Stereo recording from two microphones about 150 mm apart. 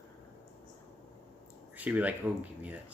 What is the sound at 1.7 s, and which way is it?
Speech, 10° right (ahead or behind).